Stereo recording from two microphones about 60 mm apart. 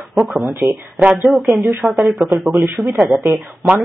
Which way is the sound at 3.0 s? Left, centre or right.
Centre.